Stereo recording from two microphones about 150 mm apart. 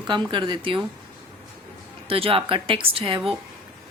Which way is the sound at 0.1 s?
30° right (ahead or behind).